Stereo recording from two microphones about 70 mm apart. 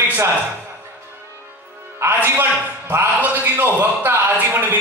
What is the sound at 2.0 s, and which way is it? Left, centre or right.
A man's voice, right.